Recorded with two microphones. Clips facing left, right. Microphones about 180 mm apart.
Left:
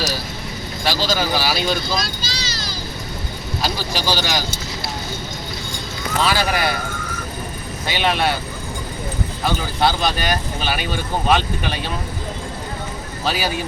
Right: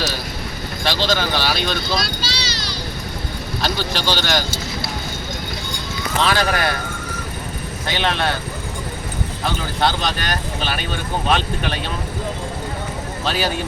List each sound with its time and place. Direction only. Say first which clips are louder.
0.9 s speech: even; 5° left (ahead or behind)
2.0 s speech: right 2 dB; 45° left (ahead or behind)
3.6 s speech: right 1 dB; 10° left (ahead or behind)
6.2 s speech: right 1 dB; 10° left (ahead or behind)
7.9 s speech: left 2 dB; 10° left (ahead or behind)
9.8 s speech: left 2 dB; 10° left (ahead or behind)
13.2 s speech: even; 5° left (ahead or behind)